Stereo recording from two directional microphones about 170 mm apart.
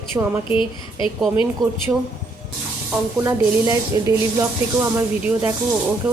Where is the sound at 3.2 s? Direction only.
20° right (ahead or behind).